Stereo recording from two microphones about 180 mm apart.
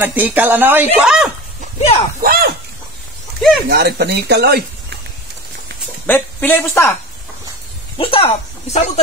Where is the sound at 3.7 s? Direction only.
65° right (ahead or behind).